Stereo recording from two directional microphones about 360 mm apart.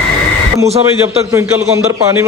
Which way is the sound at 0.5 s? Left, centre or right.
Centre.